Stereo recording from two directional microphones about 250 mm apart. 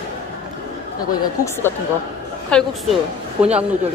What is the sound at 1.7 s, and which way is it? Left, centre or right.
Speech, centre.